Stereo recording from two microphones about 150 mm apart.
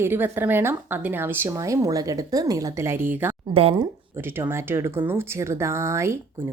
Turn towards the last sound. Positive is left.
turn(degrees=-20)  # may be behind; listen again after turning